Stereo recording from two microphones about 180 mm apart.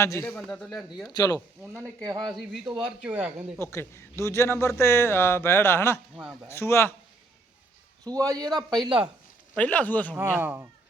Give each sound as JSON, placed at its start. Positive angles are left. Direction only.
{"t": 0.0, "sound": "a man's voice", "side_deg": 15}
{"t": 0.3, "sound": "speech", "side_deg": 5}
{"t": 1.0, "sound": "speech", "side_deg": 20}
{"t": 1.6, "sound": "speech", "side_deg": -15}
{"t": 2.2, "sound": "speech", "side_deg": 0}
{"t": 3.6, "sound": "a man's voice", "side_deg": 15}
{"t": 8.0, "sound": "a man's voice", "side_deg": -20}
{"t": 8.4, "sound": "speech", "side_deg": 0}
{"t": 8.8, "sound": "a man's voice", "side_deg": -30}
{"t": 9.6, "sound": "a man's voice", "side_deg": 10}
{"t": 10.2, "sound": "speech", "side_deg": -10}